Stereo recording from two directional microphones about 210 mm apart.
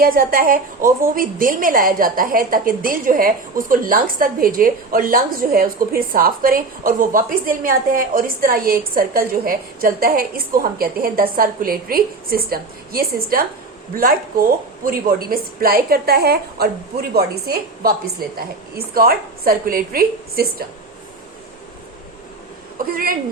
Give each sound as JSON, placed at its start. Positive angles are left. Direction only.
{"t": 0.0, "sound": "a woman's voice", "side_deg": -45}